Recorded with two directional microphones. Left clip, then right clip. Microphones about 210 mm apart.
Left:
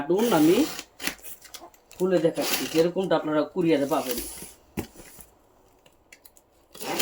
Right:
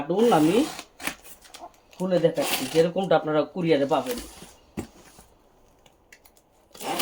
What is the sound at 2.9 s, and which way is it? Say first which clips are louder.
Speech: right 2 dB; 30° right (ahead or behind).